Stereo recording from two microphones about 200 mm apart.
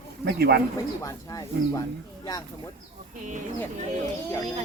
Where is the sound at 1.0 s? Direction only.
15° left (ahead or behind).